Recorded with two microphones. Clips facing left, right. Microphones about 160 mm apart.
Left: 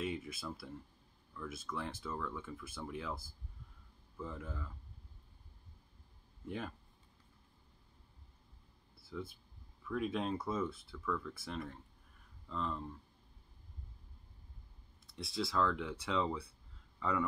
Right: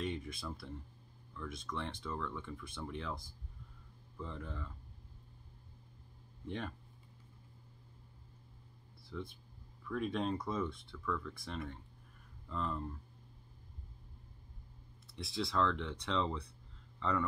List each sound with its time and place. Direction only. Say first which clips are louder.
0.0 s speech: even; 5° left (ahead or behind)
6.4 s speech: right 1 dB; 5° left (ahead or behind)
9.0 s speech: even; 5° left (ahead or behind)
15.0 s speech: even; centre (ahead or behind)